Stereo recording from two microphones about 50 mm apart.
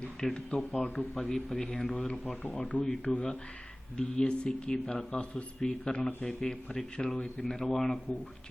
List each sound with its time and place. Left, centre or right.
0.2 s speech: centre